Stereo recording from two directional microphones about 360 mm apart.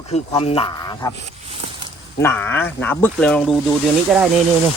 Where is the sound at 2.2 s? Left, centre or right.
Centre.